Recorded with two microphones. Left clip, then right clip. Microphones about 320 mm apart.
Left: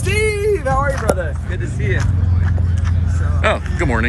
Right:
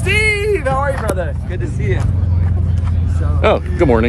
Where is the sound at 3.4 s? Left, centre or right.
Centre.